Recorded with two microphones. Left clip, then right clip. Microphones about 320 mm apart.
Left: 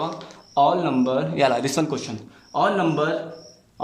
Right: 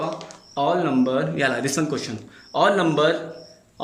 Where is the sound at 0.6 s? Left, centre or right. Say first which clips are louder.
Left 2 dB; centre.